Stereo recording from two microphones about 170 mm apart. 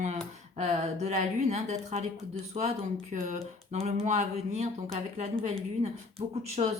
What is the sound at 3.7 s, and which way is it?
Speech, 40° right (ahead or behind).